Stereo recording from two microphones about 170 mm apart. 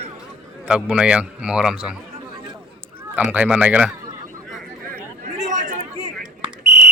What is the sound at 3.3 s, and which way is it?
Speech, 10° right (ahead or behind).